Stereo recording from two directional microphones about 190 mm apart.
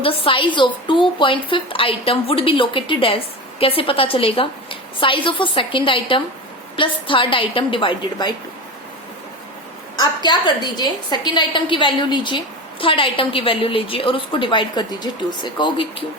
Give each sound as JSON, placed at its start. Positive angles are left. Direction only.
{"t": 0.0, "sound": "speech", "side_deg": 30}
{"t": 10.0, "sound": "speech", "side_deg": 20}